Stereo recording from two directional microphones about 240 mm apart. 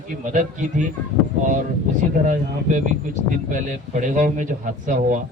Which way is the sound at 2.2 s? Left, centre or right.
Right.